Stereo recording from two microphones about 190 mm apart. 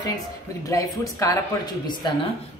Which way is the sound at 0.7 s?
15° left (ahead or behind).